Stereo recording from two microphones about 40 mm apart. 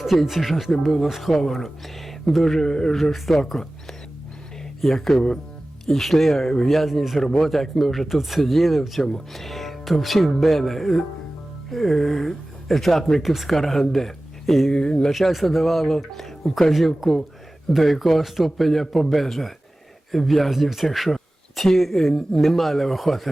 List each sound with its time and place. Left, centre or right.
0.2 s speech: centre
8.0 s speech: centre
13.6 s speech: centre
14.7 s speech: left
15.2 s speech: centre